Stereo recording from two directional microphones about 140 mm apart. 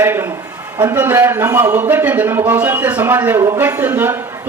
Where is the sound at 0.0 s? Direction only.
15° right (ahead or behind).